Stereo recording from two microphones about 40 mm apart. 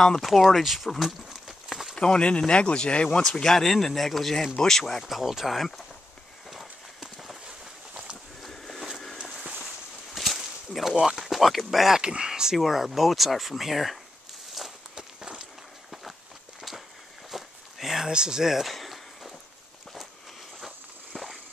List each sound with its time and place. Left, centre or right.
0.2 s speech: centre
0.9 s a sound: centre
2.0 s speech: left
3.2 s speech: centre
5.0 s speech: centre
6.5 s horse: centre
8.5 s a sound: centre
11.1 s speech: centre
12.0 s speech: right
12.5 s speech: centre
15.0 s run: centre
15.9 s walk: centre
17.3 s a sound: centre
21.1 s a sound: centre